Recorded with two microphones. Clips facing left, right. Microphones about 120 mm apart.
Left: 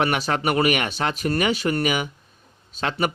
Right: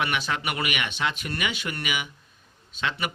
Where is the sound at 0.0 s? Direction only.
40° left (ahead or behind).